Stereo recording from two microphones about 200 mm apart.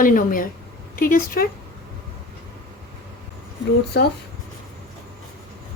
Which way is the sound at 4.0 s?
55° left (ahead or behind).